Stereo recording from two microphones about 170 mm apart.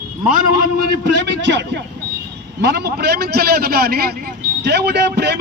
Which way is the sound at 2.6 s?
75° right (ahead or behind).